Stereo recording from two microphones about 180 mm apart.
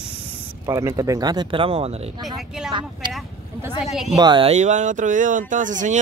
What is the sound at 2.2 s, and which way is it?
Speech, centre (ahead or behind).